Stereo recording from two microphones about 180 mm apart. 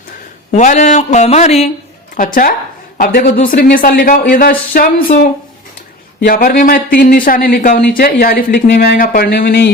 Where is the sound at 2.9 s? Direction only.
60° left (ahead or behind).